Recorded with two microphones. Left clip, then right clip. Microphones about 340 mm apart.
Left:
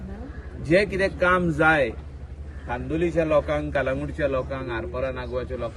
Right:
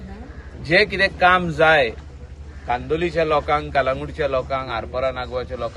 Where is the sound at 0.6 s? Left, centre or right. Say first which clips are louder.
Right 4 dB; centre.